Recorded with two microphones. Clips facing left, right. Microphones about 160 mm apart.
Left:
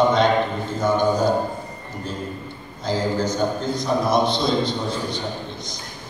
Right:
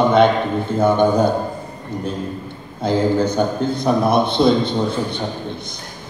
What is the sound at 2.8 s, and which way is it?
A man's voice, 60° right (ahead or behind).